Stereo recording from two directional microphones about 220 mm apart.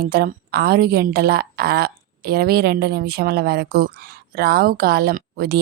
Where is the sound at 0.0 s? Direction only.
45° right (ahead or behind).